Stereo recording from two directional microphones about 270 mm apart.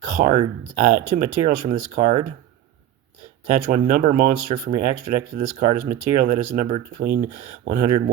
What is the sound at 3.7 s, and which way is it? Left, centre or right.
Speech, right.